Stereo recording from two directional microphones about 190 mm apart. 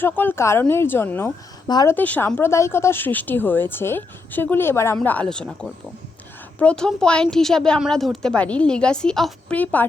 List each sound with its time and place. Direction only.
0.0 s a woman's voice: 10° left (ahead or behind)
2.0 s speech: 10° left (ahead or behind)
6.6 s speech: 5° left (ahead or behind)